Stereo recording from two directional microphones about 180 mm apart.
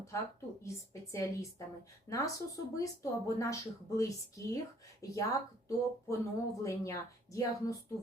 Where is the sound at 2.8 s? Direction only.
20° left (ahead or behind).